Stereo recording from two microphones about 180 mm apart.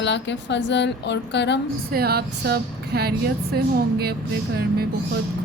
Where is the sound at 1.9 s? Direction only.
60° right (ahead or behind).